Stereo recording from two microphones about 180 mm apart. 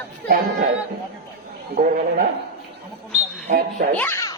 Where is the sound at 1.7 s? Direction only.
55° right (ahead or behind).